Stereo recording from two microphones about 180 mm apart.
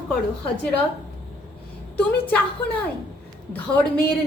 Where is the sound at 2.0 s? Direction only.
10° left (ahead or behind).